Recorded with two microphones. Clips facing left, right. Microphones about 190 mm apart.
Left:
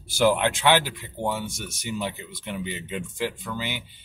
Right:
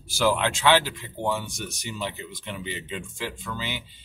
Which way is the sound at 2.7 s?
15° left (ahead or behind).